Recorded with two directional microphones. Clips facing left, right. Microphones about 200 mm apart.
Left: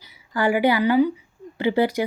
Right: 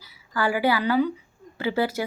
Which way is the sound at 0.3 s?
20° left (ahead or behind).